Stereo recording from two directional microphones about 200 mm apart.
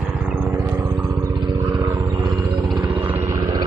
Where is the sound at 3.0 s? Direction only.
10° right (ahead or behind).